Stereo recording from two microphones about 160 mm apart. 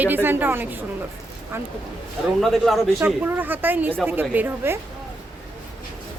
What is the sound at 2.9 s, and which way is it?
Speech, 10° right (ahead or behind).